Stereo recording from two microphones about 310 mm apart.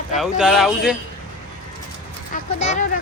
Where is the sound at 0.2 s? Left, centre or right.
Centre.